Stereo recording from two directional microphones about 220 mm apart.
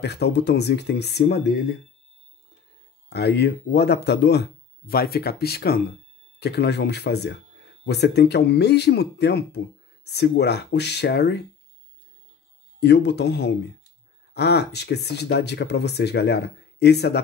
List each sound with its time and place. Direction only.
0.0 s speech: 50° left (ahead or behind)
3.1 s speech: 50° left (ahead or behind)
12.8 s speech: 50° left (ahead or behind)